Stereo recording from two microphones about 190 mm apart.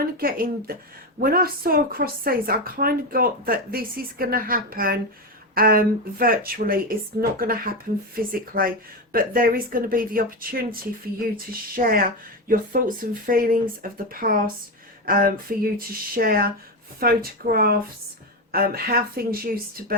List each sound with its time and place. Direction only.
0.0 s a woman's voice: 50° right (ahead or behind)